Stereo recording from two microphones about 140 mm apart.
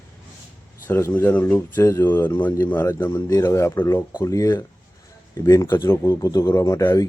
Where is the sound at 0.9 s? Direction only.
20° left (ahead or behind).